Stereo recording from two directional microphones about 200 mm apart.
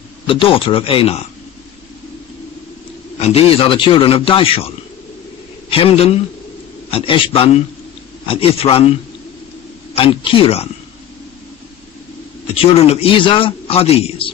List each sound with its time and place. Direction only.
0.3 s a man's voice: 25° left (ahead or behind)
3.2 s a man's voice: 30° left (ahead or behind)
5.7 s a man's voice: 30° left (ahead or behind)
9.9 s a man's voice: 25° left (ahead or behind)
12.8 s a man's voice: 30° left (ahead or behind)